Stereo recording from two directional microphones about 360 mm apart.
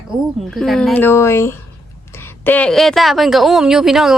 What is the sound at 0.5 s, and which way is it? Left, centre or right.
A woman's voice, centre.